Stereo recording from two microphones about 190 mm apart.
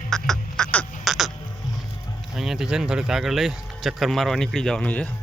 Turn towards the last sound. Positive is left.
turn(degrees=5)  # may be behind; listen again after turning